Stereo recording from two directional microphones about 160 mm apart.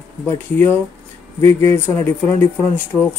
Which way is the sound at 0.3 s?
15° left (ahead or behind).